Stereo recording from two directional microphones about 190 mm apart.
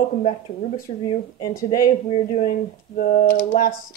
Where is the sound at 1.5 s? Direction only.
45° left (ahead or behind).